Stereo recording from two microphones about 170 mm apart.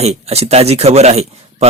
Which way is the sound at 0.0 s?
40° right (ahead or behind).